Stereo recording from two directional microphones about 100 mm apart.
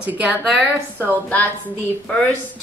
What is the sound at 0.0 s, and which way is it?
Speech, 15° right (ahead or behind).